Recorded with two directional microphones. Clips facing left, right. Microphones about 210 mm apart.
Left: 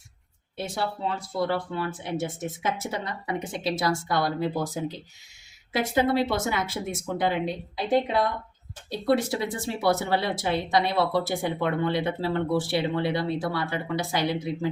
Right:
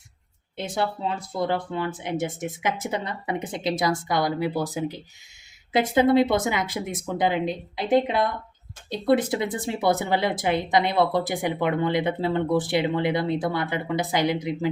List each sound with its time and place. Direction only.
0.5 s speech: 20° right (ahead or behind)
5.7 s speech: 20° right (ahead or behind)